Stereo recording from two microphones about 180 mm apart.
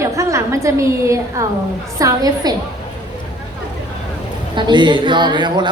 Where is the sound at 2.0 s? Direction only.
20° right (ahead or behind).